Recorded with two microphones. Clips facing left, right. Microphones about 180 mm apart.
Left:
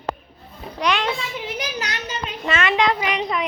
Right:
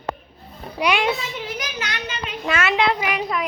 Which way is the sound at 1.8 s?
40° left (ahead or behind).